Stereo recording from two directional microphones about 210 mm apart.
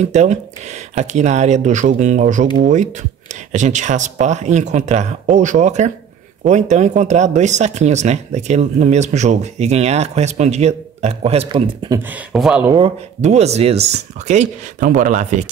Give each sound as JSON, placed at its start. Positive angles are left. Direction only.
{"t": 0.1, "sound": "speech", "side_deg": -35}
{"t": 12.0, "sound": "speech", "side_deg": -5}
{"t": 12.7, "sound": "speech", "side_deg": -30}